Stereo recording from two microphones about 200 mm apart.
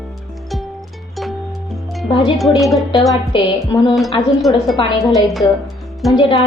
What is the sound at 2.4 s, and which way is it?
Speech, centre (ahead or behind).